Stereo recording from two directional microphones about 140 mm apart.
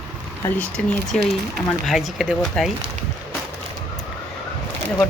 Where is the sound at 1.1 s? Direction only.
5° left (ahead or behind).